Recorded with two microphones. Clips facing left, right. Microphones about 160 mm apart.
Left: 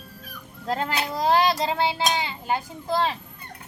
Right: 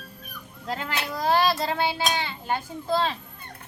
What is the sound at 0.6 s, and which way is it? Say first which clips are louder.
Speech: left 5 dB; 40° left (ahead or behind).